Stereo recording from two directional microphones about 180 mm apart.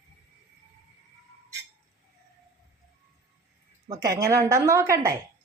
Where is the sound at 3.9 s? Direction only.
20° right (ahead or behind).